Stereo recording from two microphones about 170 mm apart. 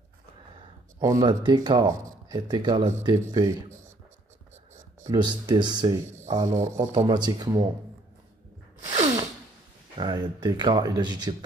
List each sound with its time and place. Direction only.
0.9 s speech: 20° right (ahead or behind)
5.0 s speech: 25° right (ahead or behind)
6.4 s speech: 45° right (ahead or behind)
7.1 s speech: 25° right (ahead or behind)
8.8 s snort: 20° right (ahead or behind)
9.9 s speech: 25° right (ahead or behind)